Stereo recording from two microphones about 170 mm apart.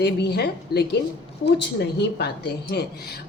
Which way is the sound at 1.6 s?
85° left.